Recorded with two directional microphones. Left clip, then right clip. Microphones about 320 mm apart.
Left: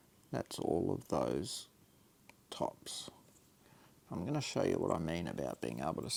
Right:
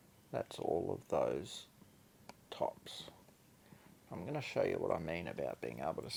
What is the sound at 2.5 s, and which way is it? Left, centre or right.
Speech, left.